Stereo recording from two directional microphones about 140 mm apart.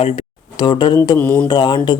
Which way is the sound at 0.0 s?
35° left (ahead or behind).